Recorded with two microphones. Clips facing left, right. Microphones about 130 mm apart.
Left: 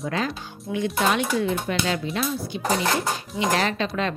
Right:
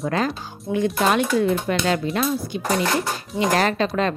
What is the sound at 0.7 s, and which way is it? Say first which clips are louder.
Speech: right 3 dB; 45° right (ahead or behind).